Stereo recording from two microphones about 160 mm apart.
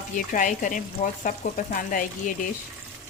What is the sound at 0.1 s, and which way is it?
A woman's voice, 55° left (ahead or behind).